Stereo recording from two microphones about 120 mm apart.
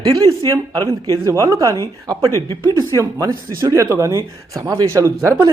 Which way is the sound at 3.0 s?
30° right (ahead or behind).